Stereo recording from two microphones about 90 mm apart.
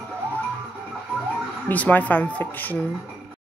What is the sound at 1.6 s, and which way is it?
Speech, 20° left (ahead or behind).